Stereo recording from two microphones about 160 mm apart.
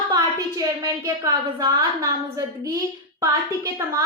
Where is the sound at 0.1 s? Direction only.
25° right (ahead or behind).